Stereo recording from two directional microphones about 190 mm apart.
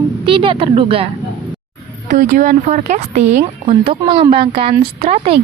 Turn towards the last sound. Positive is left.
turn(degrees=-35)  # may be behind; listen again after turning